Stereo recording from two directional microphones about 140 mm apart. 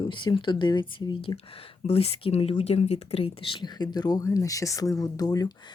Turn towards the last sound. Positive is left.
turn(degrees=25)  # may be behind; listen again after turning